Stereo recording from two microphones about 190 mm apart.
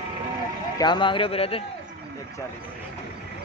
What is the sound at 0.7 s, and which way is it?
Speech, 25° left (ahead or behind).